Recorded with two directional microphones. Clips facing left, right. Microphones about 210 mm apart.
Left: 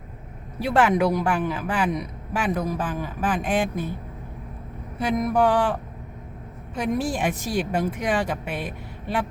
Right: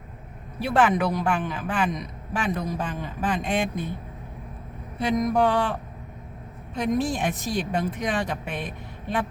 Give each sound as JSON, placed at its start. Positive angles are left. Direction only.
{"t": 0.6, "sound": "a woman's voice", "side_deg": 10}
{"t": 4.9, "sound": "a woman's voice", "side_deg": 5}
{"t": 6.7, "sound": "a woman's voice", "side_deg": 10}